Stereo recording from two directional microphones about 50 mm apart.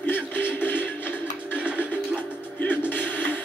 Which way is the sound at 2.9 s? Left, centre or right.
Left.